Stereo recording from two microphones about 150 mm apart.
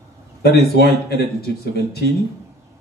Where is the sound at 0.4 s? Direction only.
90° left.